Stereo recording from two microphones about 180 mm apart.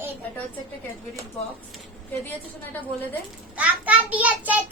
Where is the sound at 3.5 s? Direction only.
10° right (ahead or behind).